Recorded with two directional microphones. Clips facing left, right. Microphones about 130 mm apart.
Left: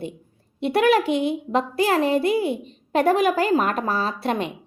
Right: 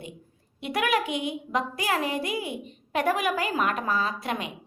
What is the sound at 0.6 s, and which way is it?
A child's voice, 30° left (ahead or behind).